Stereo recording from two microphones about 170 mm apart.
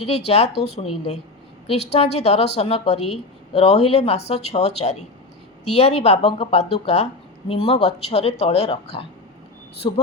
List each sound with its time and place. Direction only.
0.3 s a woman's voice: 40° left (ahead or behind)